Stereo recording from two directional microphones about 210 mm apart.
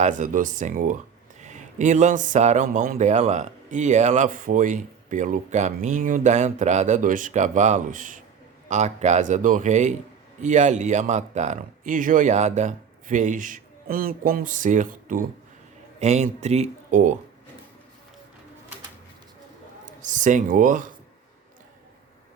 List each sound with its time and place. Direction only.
0.0 s speech: 35° right (ahead or behind)
19.8 s speech: 35° right (ahead or behind)